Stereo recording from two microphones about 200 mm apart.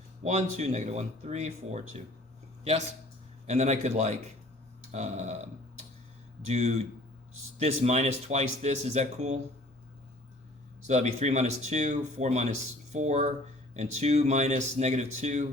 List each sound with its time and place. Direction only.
0.3 s speech: 35° right (ahead or behind)
3.4 s speech: 35° right (ahead or behind)
10.8 s speech: 35° right (ahead or behind)